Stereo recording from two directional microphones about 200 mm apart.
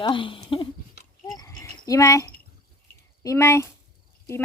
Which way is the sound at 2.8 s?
15° left (ahead or behind).